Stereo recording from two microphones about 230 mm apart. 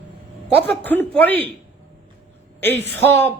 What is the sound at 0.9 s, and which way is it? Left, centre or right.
Speech, centre.